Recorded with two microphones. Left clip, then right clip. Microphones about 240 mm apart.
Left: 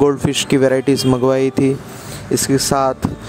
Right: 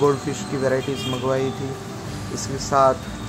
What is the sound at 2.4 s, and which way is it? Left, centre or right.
Speech, left.